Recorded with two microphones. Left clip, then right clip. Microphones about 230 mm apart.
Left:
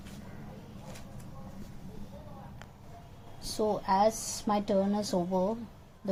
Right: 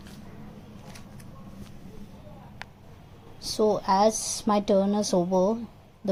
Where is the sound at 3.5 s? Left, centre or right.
Right.